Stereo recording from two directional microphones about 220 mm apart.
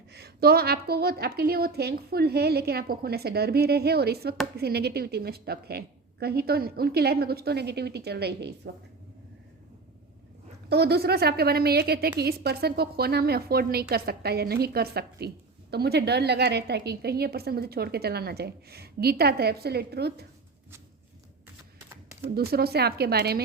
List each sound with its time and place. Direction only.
0.1 s a woman's voice: 45° right (ahead or behind)
10.7 s a woman's voice: 45° right (ahead or behind)
21.8 s a sound: 10° right (ahead or behind)
22.4 s a woman's voice: 45° right (ahead or behind)